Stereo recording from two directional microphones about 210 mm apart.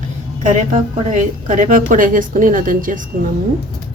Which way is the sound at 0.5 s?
35° right (ahead or behind).